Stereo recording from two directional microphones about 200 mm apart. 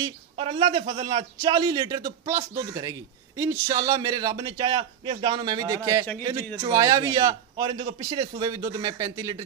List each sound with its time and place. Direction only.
0.0 s a man's voice: 25° right (ahead or behind)